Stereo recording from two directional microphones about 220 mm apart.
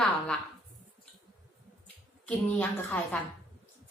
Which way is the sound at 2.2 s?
5° left (ahead or behind).